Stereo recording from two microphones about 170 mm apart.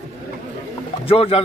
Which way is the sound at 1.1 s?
35° left (ahead or behind).